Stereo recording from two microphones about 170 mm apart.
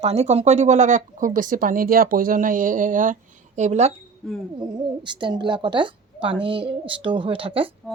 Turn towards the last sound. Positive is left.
turn(degrees=-30)  # may be behind; listen again after turning